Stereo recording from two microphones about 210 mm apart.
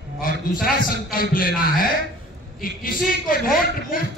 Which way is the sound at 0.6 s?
45° left (ahead or behind).